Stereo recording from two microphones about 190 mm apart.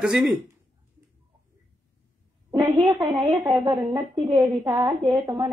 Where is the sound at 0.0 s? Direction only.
Centre (ahead or behind).